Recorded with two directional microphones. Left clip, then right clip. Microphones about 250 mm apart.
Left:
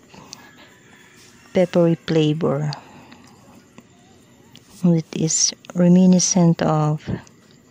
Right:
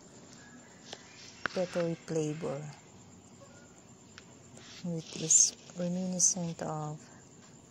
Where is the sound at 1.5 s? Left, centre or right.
Left.